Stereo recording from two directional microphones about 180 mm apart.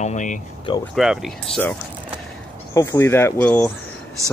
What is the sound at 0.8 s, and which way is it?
Speech, centre (ahead or behind).